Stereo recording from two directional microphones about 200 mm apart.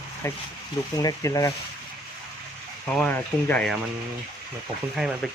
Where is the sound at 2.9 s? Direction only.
5° left (ahead or behind).